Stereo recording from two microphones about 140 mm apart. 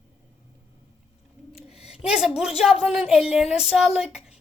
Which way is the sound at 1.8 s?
5° right (ahead or behind).